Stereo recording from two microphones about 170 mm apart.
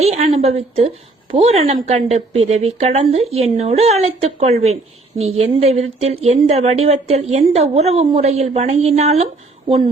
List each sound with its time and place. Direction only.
0.3 s a woman's voice: 35° right (ahead or behind)